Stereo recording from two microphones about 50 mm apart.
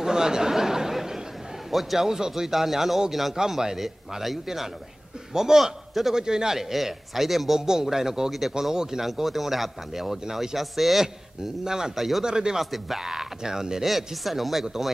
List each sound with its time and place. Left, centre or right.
0.0 s a sound: centre
1.7 s a man's voice: centre
11.6 s a man's voice: centre
12.3 s a man's voice: centre
12.5 s a man's voice: centre